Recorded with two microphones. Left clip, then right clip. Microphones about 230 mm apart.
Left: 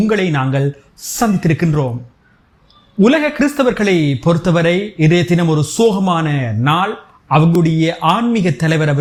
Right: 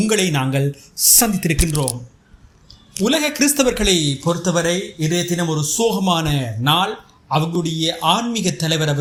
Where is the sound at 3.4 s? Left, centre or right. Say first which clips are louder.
Left 3 dB; centre.